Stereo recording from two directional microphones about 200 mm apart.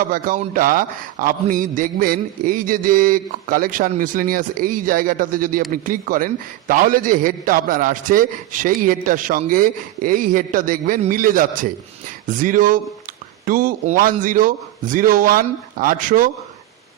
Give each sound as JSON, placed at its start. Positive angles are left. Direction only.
{"t": 0.1, "sound": "a man's voice", "side_deg": -45}